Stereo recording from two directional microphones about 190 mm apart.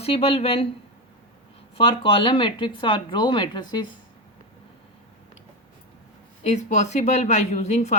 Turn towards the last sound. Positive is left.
turn(degrees=35)  # may be behind; listen again after turning